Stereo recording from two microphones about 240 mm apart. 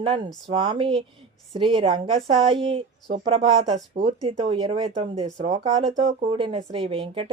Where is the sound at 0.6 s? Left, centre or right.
Centre.